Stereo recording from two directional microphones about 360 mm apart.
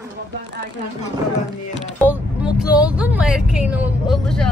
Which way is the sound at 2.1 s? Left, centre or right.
Centre.